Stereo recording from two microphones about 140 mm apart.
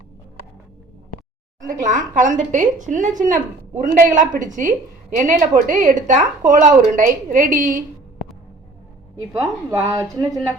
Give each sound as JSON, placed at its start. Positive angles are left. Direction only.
{"t": 1.6, "sound": "a woman's voice", "side_deg": -65}
{"t": 9.4, "sound": "a woman's voice", "side_deg": -20}